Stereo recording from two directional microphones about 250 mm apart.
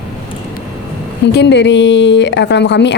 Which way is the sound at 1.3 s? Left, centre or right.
Left.